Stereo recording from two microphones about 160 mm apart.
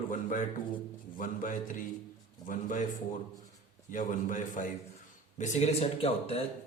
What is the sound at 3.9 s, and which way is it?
A man's voice, 55° left (ahead or behind).